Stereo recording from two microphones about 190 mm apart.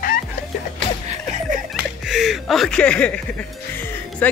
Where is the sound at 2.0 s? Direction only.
Centre (ahead or behind).